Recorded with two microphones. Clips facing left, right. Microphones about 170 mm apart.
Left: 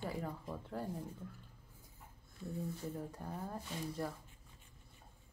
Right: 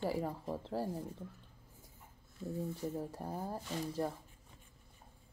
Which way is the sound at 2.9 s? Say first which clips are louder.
Right 4 dB; 30° right (ahead or behind).